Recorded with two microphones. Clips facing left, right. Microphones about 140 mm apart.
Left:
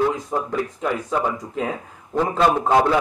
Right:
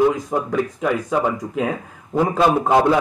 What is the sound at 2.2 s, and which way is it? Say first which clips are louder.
Speech: right 2 dB; 10° right (ahead or behind).